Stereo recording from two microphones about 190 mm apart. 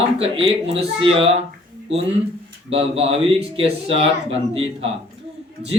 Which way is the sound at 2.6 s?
30° right (ahead or behind).